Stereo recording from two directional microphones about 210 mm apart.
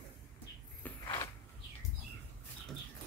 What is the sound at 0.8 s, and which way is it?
Creak, 10° left (ahead or behind).